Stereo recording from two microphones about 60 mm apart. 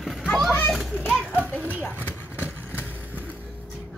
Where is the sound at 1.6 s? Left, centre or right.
Right.